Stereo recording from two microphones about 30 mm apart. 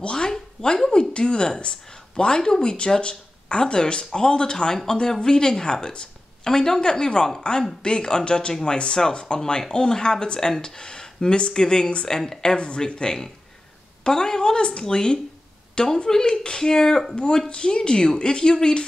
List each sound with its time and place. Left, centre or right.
0.0 s a woman's voice: left
17.1 s speech: left